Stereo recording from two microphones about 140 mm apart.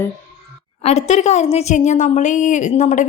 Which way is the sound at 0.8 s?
50° left (ahead or behind).